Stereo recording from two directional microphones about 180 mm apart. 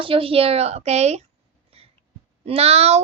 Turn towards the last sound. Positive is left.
turn(degrees=-35)  # may be behind; listen again after turning